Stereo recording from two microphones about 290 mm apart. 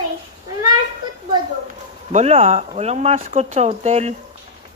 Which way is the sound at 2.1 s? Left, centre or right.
Right.